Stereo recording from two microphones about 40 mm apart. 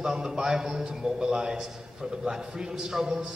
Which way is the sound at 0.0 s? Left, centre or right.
Centre.